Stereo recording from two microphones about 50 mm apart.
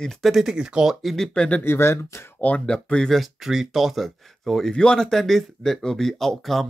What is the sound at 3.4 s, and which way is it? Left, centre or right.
Speech, centre.